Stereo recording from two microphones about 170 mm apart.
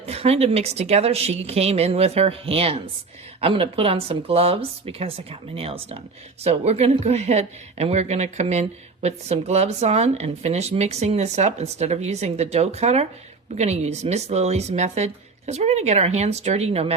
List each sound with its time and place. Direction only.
0.0 s speech: 35° right (ahead or behind)